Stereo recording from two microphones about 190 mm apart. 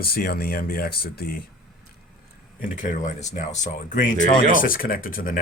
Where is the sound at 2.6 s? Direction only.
45° left (ahead or behind).